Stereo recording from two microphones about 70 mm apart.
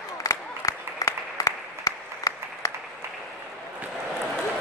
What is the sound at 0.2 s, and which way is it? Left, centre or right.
Applause, left.